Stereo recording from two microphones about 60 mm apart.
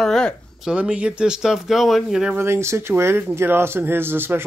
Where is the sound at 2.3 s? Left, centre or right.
Right.